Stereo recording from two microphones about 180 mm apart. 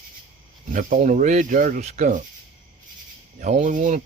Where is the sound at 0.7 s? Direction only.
45° right (ahead or behind).